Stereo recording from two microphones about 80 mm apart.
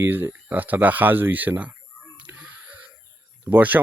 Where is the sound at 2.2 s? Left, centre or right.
Centre.